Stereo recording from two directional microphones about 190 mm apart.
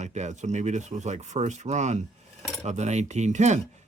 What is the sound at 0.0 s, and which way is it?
Speech, 35° right (ahead or behind).